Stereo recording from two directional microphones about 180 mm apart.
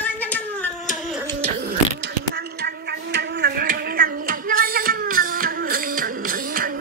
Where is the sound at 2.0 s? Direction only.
60° right (ahead or behind).